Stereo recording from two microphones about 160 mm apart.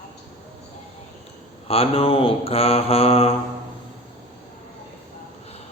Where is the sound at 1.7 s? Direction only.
35° left (ahead or behind).